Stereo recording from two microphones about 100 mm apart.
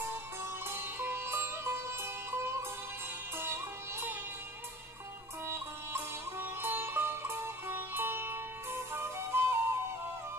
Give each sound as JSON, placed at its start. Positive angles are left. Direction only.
{"t": 0.7, "sound": "music", "side_deg": -25}
{"t": 5.5, "sound": "music", "side_deg": -25}